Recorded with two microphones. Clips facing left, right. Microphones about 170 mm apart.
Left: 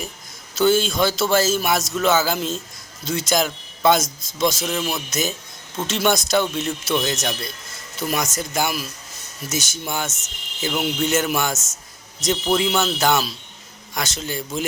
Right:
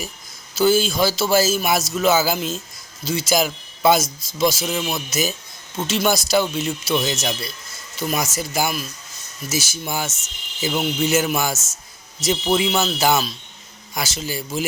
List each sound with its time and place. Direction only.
0.5 s a man's voice: 5° right (ahead or behind)